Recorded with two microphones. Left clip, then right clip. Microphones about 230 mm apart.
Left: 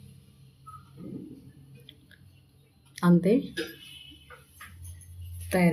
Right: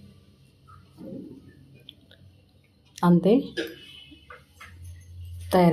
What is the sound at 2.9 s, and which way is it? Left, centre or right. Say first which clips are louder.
Speech: right 3 dB; centre.